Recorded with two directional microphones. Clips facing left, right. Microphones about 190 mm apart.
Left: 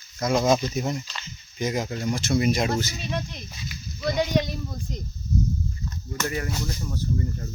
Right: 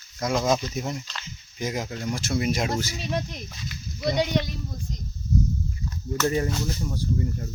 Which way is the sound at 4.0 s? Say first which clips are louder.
Right 1 dB; 20° right (ahead or behind).